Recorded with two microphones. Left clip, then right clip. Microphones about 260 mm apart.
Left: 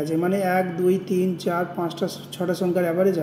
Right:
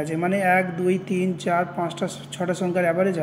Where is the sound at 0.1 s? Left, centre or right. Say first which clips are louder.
Right 2 dB; right.